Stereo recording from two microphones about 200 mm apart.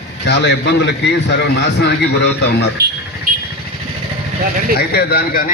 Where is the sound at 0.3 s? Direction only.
60° left (ahead or behind).